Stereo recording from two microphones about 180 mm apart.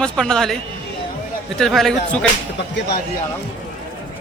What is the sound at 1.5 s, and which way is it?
Speech, centre (ahead or behind).